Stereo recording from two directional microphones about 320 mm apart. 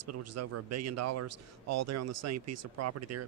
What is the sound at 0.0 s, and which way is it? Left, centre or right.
Speech, right.